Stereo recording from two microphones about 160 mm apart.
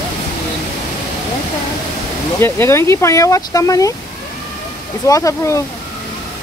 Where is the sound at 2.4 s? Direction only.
15° left (ahead or behind).